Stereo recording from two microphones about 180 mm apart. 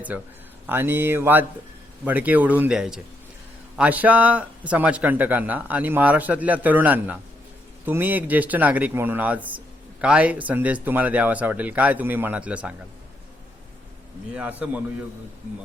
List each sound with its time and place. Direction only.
0.1 s speech: 10° right (ahead or behind)
14.3 s speech: 5° right (ahead or behind)